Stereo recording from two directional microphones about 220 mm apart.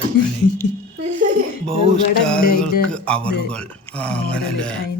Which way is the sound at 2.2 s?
5° left (ahead or behind).